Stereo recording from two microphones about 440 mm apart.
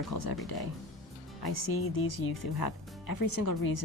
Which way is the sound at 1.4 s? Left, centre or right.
Left.